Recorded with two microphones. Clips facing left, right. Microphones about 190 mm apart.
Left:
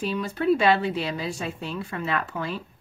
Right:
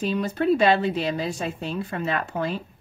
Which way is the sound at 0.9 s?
45° right (ahead or behind).